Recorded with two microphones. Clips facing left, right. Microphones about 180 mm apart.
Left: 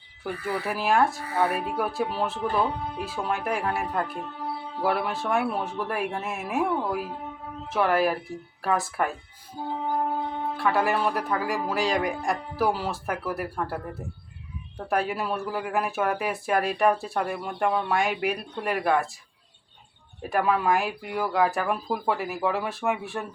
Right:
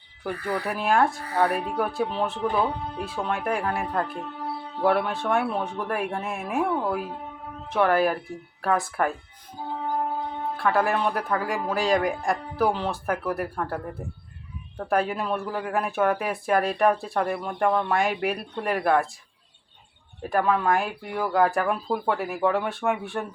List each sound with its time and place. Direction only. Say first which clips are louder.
0.4 s speech: even; 5° left (ahead or behind)
14.8 s speech: right 2 dB; 5° left (ahead or behind)
20.3 s speech: right 1 dB; 10° left (ahead or behind)